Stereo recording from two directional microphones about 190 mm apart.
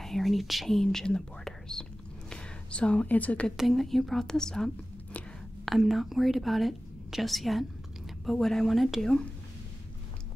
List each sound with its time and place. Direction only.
0.0 s speech: centre (ahead or behind)
5.7 s a woman's voice: centre (ahead or behind)